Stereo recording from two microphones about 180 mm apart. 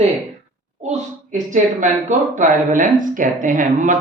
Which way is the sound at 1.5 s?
45° right (ahead or behind).